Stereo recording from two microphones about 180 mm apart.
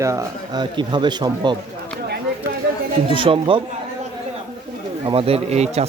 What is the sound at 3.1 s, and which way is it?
Speech, 30° right (ahead or behind).